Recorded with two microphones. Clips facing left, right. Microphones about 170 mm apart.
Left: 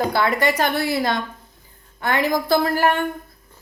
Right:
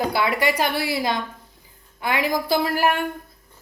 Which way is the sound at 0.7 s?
50° left (ahead or behind).